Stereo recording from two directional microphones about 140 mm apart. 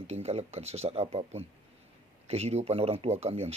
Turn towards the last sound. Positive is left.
turn(degrees=-45)  # may be behind; listen again after turning